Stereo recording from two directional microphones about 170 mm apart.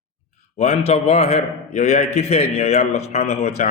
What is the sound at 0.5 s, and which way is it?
A man's voice, 40° left (ahead or behind).